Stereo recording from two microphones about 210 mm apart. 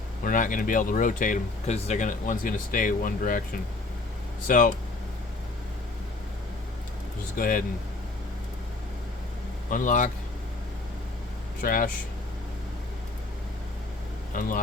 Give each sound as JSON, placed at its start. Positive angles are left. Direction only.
{"t": 0.3, "sound": "speech", "side_deg": 40}
{"t": 4.4, "sound": "speech", "side_deg": 40}
{"t": 7.3, "sound": "speech", "side_deg": 40}
{"t": 9.6, "sound": "speech", "side_deg": 40}
{"t": 11.6, "sound": "speech", "side_deg": 40}
{"t": 14.3, "sound": "speech", "side_deg": 40}